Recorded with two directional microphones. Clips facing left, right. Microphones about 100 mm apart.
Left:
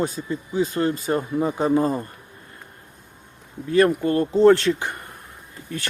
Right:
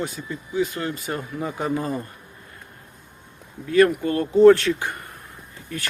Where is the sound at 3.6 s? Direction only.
25° left (ahead or behind).